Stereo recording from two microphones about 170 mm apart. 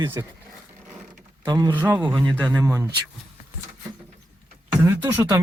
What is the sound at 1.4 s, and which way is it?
Speech, 25° right (ahead or behind).